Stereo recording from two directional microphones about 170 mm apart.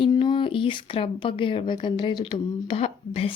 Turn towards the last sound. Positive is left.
turn(degrees=35)  # may be behind; listen again after turning